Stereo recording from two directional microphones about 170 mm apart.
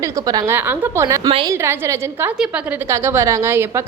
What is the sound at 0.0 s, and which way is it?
A woman's voice, 20° right (ahead or behind).